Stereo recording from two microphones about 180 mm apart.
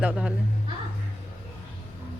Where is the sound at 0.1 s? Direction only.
5° right (ahead or behind).